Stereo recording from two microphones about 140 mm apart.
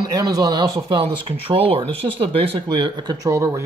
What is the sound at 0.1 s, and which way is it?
Speech, 25° right (ahead or behind).